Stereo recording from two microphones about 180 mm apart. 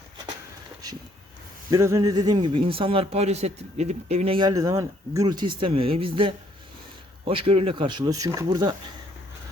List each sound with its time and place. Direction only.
1.7 s a man's voice: 20° right (ahead or behind); by 4.4 s 35° right (ahead or behind)
4.4 s a man's voice: 20° right (ahead or behind)